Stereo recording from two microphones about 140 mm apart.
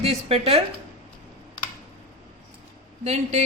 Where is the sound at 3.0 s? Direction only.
55° right (ahead or behind).